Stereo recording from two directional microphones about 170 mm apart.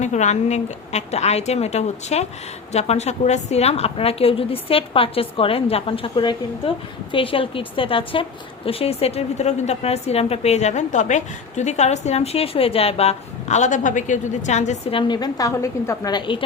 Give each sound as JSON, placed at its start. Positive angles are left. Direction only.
{"t": 0.0, "sound": "a woman's voice", "side_deg": 45}